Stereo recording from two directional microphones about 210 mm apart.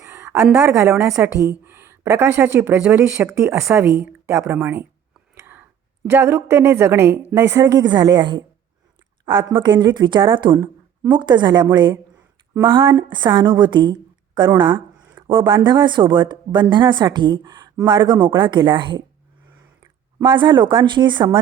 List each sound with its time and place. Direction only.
0.0 s a sound: 10° right (ahead or behind)
0.5 s a woman's voice: 10° right (ahead or behind)
5.3 s whispering: 10° right (ahead or behind)
6.1 s a woman's voice: 10° right (ahead or behind)